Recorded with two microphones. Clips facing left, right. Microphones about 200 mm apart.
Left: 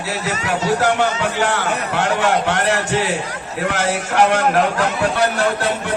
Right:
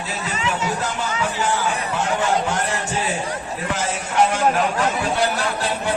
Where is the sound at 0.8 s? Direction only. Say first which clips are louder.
Left 7 dB; 70° left (ahead or behind).